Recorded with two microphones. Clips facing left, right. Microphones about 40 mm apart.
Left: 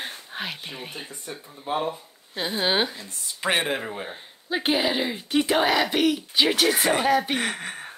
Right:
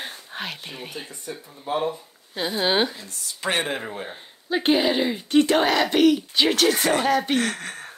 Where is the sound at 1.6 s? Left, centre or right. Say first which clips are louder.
Right 1 dB; centre.